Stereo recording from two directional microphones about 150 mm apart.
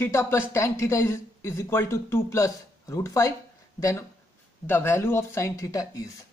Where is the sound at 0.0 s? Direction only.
15° left (ahead or behind).